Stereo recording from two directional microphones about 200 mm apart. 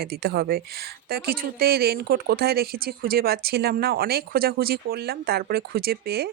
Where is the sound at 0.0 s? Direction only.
50° right (ahead or behind).